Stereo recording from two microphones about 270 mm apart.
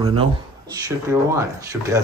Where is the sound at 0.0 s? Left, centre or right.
Centre.